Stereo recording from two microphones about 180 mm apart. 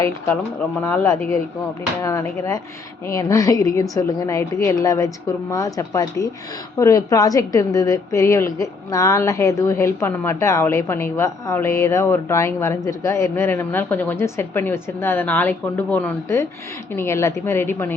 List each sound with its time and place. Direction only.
0.9 s a woman's voice: 15° left (ahead or behind)